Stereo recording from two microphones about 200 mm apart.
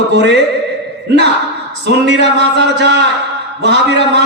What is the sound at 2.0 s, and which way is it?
A man's voice, 60° right (ahead or behind).